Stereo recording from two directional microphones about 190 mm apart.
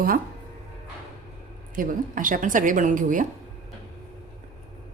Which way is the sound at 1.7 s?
45° right (ahead or behind).